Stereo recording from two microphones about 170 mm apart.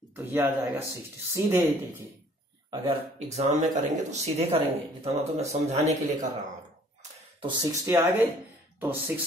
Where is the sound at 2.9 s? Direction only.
40° right (ahead or behind).